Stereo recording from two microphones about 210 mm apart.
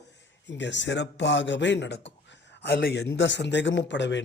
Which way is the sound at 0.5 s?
60° left (ahead or behind).